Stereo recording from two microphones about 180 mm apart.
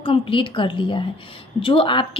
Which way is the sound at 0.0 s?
30° left (ahead or behind).